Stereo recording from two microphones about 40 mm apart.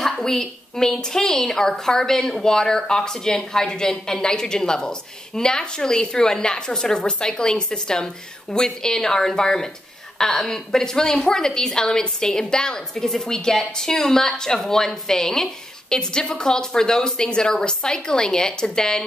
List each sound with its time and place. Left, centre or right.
0.2 s a woman's voice: centre